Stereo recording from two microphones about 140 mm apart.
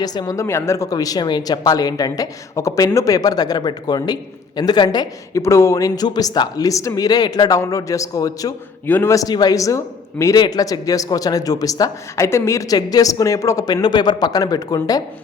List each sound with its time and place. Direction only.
0.0 s speech: 30° left (ahead or behind)